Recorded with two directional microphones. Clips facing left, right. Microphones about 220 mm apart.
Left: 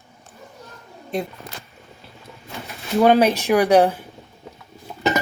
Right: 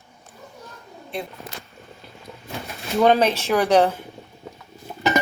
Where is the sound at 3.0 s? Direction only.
10° left (ahead or behind).